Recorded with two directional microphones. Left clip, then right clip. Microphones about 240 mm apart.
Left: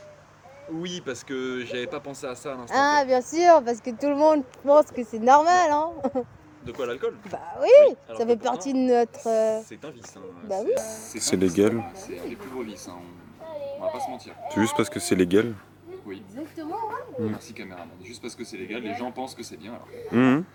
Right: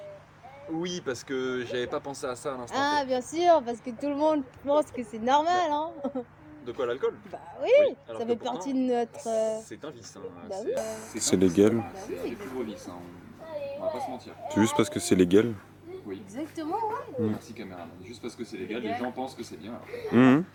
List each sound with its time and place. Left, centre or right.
0.8 s speech: centre
2.7 s a woman's voice: left
6.7 s speech: centre
7.3 s a woman's voice: left
10.7 s speech: centre
17.2 s speech: centre